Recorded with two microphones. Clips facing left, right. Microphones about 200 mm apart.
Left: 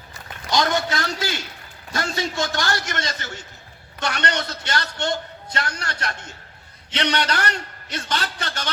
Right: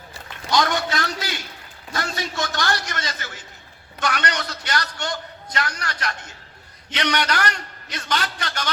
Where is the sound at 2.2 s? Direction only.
25° left (ahead or behind).